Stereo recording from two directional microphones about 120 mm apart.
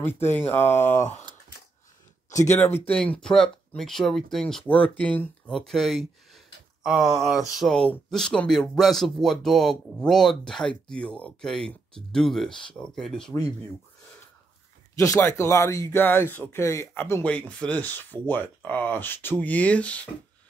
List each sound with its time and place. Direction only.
0.0 s speech: 20° left (ahead or behind)
2.3 s speech: 20° left (ahead or behind)
2.9 s speech: 10° left (ahead or behind)
5.5 s speech: centre (ahead or behind)
15.0 s speech: 25° left (ahead or behind)